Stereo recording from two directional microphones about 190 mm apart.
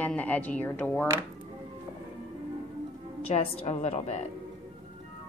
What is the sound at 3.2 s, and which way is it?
Speech, 30° left (ahead or behind).